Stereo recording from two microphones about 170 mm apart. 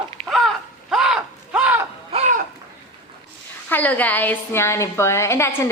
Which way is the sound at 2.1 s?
45° right (ahead or behind).